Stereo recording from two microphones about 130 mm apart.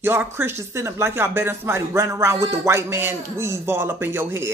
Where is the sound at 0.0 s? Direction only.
15° right (ahead or behind).